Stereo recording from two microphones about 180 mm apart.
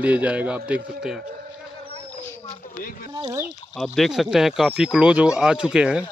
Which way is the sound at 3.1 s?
20° right (ahead or behind).